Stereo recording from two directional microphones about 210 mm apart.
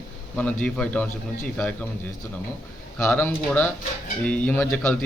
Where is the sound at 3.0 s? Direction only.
5° left (ahead or behind).